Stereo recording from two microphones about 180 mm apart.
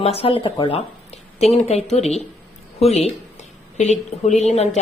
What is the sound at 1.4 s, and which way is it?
Speech, 40° left (ahead or behind).